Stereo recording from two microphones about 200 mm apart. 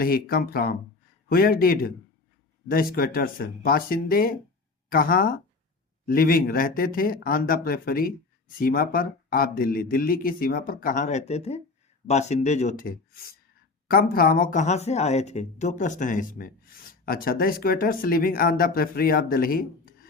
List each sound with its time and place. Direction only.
0.0 s speech: 45° left (ahead or behind)